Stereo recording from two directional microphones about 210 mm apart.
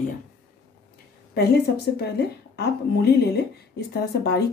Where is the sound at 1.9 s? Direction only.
50° left (ahead or behind).